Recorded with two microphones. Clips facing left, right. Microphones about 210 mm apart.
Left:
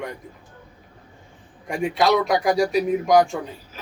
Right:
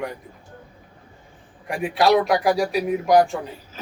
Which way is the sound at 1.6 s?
Centre (ahead or behind).